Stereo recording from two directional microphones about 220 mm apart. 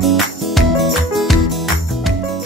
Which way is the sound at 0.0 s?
Centre (ahead or behind).